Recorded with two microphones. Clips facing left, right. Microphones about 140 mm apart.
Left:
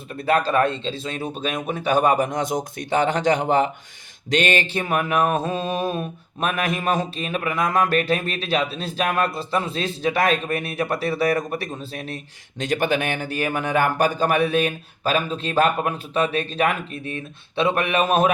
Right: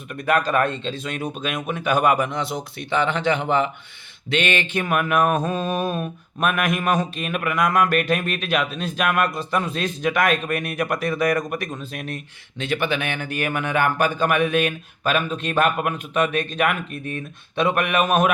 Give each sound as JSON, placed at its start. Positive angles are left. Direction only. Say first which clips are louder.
{"t": 0.1, "sound": "speech", "louder": "left 1 dB", "side_deg": 30}
{"t": 12.6, "sound": "speech", "louder": "left 2 dB", "side_deg": 45}
{"t": 16.9, "sound": "speech", "louder": "right 1 dB", "side_deg": -45}
{"t": 17.6, "sound": "speech", "louder": "even", "side_deg": 30}